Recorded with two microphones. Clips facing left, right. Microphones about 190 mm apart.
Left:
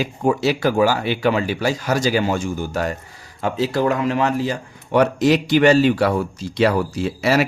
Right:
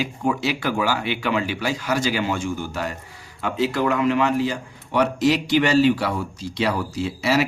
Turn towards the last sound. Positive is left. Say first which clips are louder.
# left 3 dB
turn(degrees=50)  # may be behind; listen again after turning